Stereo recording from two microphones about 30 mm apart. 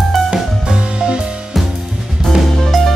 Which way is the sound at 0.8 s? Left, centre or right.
Right.